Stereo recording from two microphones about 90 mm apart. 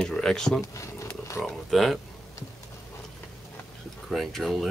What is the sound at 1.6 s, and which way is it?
Speech, centre (ahead or behind).